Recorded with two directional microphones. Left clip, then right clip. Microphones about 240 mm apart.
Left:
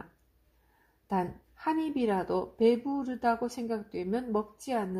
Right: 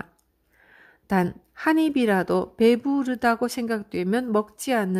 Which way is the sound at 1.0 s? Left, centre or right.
Right.